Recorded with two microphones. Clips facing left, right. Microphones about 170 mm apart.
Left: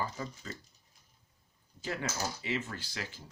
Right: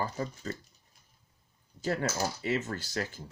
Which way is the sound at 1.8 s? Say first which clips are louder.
Right 5 dB; 45° right (ahead or behind).